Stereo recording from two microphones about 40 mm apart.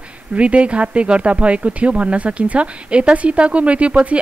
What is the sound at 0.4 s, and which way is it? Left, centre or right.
Speech, right.